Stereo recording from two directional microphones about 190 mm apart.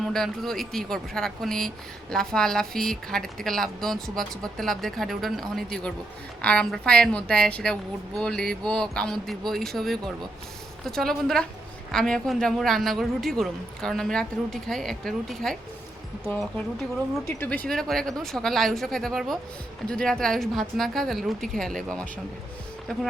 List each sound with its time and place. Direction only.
0.0 s speech: centre (ahead or behind)
17.2 s speech: 10° left (ahead or behind)